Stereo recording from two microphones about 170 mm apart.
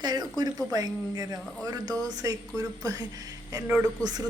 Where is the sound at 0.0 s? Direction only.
25° right (ahead or behind).